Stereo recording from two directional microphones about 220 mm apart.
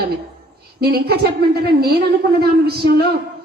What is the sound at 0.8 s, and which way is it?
A woman's voice, 45° right (ahead or behind).